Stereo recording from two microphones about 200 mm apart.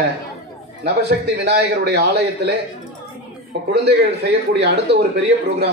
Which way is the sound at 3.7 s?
55° right (ahead or behind).